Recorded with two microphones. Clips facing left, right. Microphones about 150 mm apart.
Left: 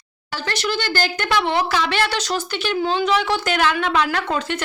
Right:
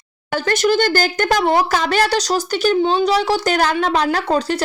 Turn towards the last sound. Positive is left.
turn(degrees=-35)  # may be behind; listen again after turning